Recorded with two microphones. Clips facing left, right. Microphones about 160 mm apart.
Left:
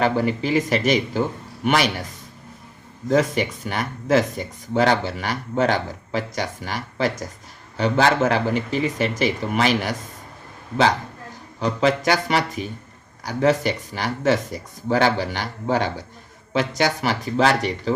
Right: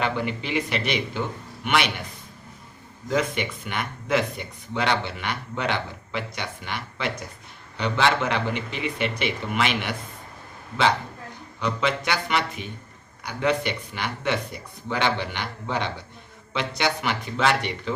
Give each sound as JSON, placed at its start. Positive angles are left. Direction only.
{"t": 0.0, "sound": "speech", "side_deg": 40}
{"t": 3.1, "sound": "speech", "side_deg": 40}
{"t": 11.6, "sound": "speech", "side_deg": 40}